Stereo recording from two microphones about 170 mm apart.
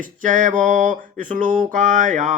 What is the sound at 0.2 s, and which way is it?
Mantra, 50° right (ahead or behind).